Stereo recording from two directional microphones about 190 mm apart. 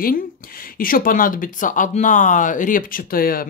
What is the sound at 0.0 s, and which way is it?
Speech, 50° left (ahead or behind).